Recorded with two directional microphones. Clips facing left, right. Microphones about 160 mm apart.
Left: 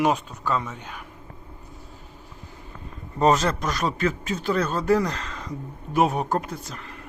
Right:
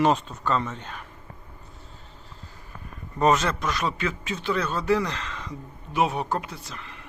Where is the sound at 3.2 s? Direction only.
35° left (ahead or behind).